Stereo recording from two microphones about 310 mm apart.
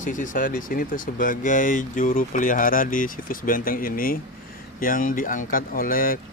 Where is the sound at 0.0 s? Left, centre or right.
Left.